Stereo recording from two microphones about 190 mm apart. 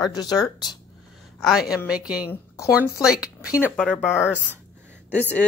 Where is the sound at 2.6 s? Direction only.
15° left (ahead or behind).